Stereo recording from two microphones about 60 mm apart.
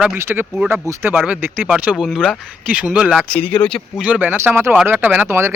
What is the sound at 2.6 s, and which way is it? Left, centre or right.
Speech, right.